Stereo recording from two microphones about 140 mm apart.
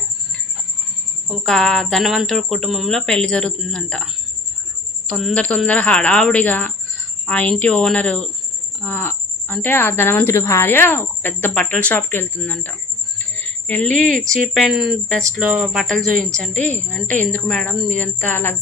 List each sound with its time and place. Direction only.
1.3 s speech: 5° left (ahead or behind)
13.1 s a sound: 15° left (ahead or behind)
14.4 s speech: centre (ahead or behind)